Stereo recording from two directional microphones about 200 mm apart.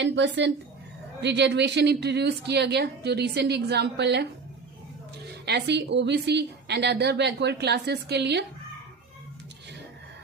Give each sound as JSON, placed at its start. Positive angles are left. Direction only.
{"t": 0.0, "sound": "a woman's voice", "side_deg": -60}
{"t": 5.5, "sound": "a woman's voice", "side_deg": -55}